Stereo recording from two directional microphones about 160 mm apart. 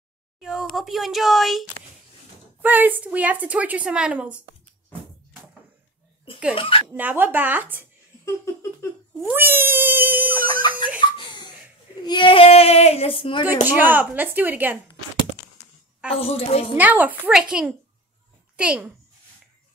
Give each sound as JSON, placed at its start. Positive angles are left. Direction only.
{"t": 0.4, "sound": "a woman's voice", "side_deg": -5}
{"t": 6.5, "sound": "speech", "side_deg": 35}
{"t": 6.9, "sound": "a woman's voice", "side_deg": -10}
{"t": 8.8, "sound": "speech", "side_deg": 15}
{"t": 9.2, "sound": "a woman's voice", "side_deg": -15}
{"t": 11.0, "sound": "laughter", "side_deg": 30}
{"t": 12.0, "sound": "speech", "side_deg": 30}
{"t": 13.5, "sound": "a woman's voice", "side_deg": -10}
{"t": 16.2, "sound": "speech", "side_deg": 40}
{"t": 16.7, "sound": "a woman's voice", "side_deg": -10}